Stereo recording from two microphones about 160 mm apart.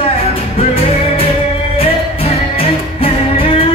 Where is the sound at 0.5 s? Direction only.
35° left (ahead or behind).